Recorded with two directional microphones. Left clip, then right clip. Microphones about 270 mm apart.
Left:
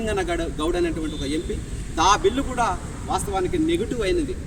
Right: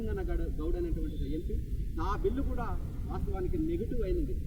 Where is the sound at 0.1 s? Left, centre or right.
Centre.